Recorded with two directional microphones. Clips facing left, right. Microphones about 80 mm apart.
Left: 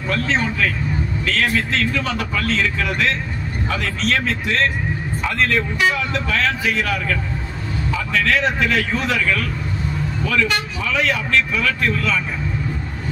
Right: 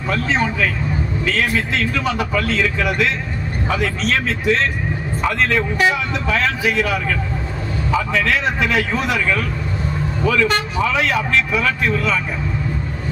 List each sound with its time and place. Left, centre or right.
0.1 s a man's voice: centre